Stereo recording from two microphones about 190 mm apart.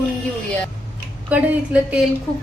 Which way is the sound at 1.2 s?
10° right (ahead or behind).